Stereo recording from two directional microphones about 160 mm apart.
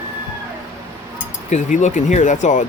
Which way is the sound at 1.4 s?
50° left (ahead or behind).